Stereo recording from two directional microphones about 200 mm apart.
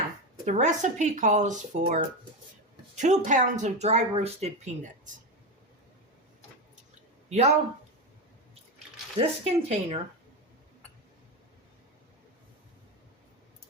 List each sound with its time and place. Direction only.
0.4 s speech: 35° right (ahead or behind)
7.3 s speech: 35° right (ahead or behind)
9.1 s speech: 30° right (ahead or behind)